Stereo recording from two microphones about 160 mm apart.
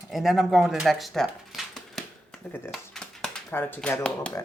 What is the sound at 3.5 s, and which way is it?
Speech, 15° left (ahead or behind).